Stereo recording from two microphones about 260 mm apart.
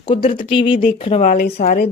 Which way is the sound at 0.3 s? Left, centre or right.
Centre.